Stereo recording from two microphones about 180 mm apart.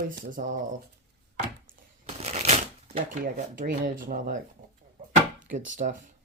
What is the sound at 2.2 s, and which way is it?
Shuffling cards, 35° right (ahead or behind).